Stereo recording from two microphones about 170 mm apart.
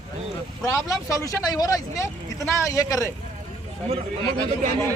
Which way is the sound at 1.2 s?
20° left (ahead or behind).